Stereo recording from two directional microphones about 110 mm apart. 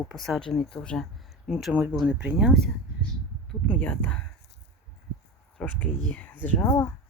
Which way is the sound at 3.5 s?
10° left (ahead or behind).